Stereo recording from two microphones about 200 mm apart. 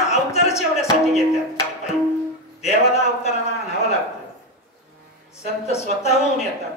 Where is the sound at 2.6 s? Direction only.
30° left (ahead or behind).